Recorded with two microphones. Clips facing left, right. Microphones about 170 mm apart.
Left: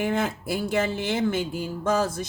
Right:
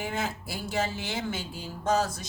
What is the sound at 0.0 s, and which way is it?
Speech, 55° left (ahead or behind).